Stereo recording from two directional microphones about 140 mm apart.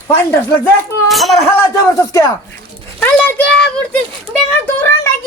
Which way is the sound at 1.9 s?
20° left (ahead or behind).